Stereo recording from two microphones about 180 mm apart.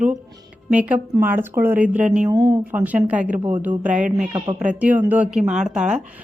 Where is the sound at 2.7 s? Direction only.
10° right (ahead or behind).